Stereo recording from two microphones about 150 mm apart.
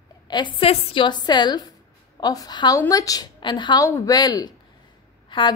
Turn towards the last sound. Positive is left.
turn(degrees=30)  # may be behind; listen again after turning